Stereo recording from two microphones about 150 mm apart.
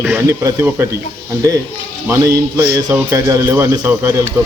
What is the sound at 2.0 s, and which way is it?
A man's voice, 15° right (ahead or behind).